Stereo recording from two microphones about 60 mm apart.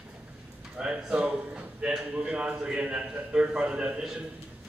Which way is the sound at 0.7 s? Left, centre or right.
Centre.